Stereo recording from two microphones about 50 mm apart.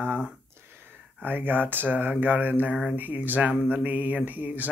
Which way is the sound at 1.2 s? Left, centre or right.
Right.